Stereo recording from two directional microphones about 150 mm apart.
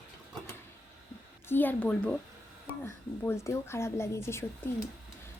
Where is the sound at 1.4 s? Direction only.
10° left (ahead or behind).